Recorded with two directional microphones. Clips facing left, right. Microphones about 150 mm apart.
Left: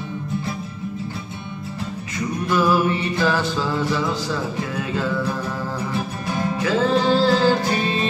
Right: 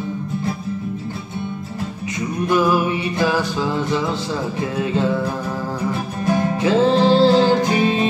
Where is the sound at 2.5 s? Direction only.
15° right (ahead or behind).